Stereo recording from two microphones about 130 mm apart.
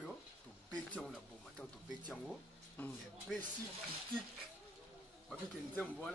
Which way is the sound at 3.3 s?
Centre (ahead or behind).